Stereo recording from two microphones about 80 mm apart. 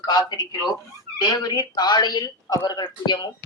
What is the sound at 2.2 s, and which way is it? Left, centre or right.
Speech, left.